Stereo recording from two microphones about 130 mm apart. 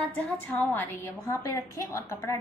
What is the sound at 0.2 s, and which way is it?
A woman's voice, 15° left (ahead or behind).